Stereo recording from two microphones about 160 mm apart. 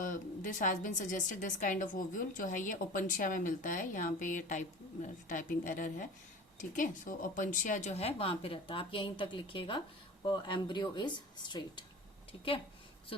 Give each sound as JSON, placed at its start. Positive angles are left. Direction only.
{"t": 0.0, "sound": "a woman's voice", "side_deg": 55}